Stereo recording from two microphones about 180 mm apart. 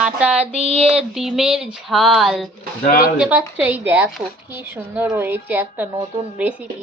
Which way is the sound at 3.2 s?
10° right (ahead or behind).